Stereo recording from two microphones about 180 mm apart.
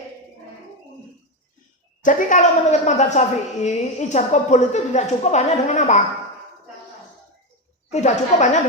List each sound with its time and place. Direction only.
2.0 s a woman's voice: 45° left (ahead or behind)
7.9 s a woman's voice: 40° left (ahead or behind)